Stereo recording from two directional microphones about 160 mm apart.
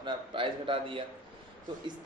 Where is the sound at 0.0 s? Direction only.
30° right (ahead or behind).